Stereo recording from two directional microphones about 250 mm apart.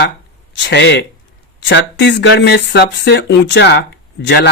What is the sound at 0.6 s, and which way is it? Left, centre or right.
Speech, left.